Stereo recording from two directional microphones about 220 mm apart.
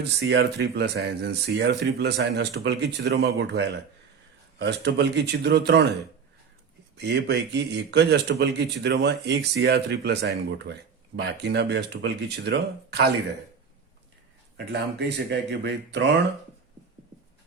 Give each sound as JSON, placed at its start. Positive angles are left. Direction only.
{"t": 0.3, "sound": "a man's voice", "side_deg": -50}
{"t": 6.9, "sound": "a man's voice", "side_deg": -50}
{"t": 14.5, "sound": "a man's voice", "side_deg": -50}